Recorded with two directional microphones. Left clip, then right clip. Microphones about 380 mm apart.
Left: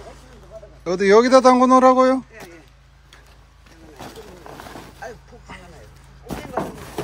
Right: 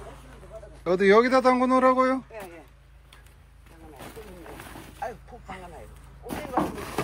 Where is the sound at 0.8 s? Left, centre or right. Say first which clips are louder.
Left 5 dB; centre.